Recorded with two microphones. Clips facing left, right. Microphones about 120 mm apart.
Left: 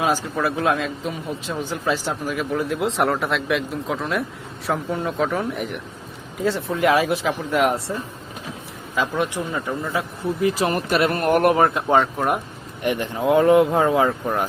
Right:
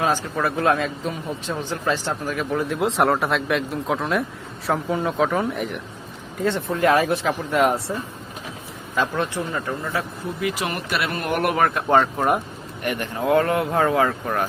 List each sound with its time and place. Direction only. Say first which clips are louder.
0.0 s speech: left 1 dB; 10° left (ahead or behind)
9.1 s speech: left 1 dB; 15° left (ahead or behind)
10.4 s speech: left 5 dB; 40° left (ahead or behind)
11.5 s speech: left 2 dB; 20° left (ahead or behind)
11.9 s speech: right 2 dB; centre (ahead or behind)
12.8 s speech: left 3 dB; 20° left (ahead or behind)